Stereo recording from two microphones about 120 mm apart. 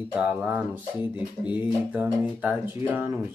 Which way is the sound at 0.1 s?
10° right (ahead or behind).